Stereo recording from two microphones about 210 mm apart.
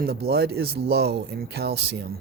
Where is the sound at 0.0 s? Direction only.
50° right (ahead or behind).